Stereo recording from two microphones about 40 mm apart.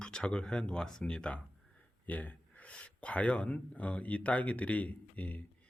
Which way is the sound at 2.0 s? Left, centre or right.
Left.